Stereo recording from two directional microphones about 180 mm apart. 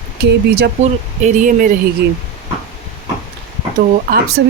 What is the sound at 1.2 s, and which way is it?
Speech, 45° right (ahead or behind).